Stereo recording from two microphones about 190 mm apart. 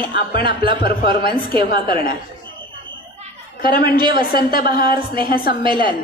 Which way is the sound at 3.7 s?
50° left (ahead or behind).